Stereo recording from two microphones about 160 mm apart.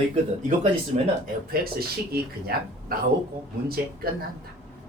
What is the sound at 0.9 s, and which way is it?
Speech, 45° right (ahead or behind).